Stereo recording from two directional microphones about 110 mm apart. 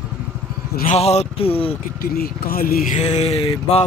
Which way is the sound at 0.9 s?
75° left (ahead or behind).